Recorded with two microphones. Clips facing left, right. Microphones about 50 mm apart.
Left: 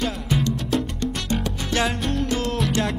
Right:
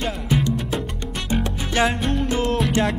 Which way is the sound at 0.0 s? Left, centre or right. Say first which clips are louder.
Right 1 dB; centre.